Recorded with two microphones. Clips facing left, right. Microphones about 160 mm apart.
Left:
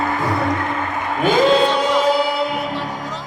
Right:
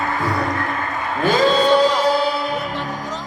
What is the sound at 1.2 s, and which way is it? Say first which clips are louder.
Music: left 1 dB; 20° left (ahead or behind).